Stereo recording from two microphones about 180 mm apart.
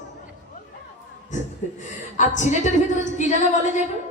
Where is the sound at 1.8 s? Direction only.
45° left (ahead or behind).